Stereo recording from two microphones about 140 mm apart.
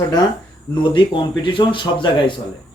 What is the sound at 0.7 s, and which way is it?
Speech, 35° left (ahead or behind).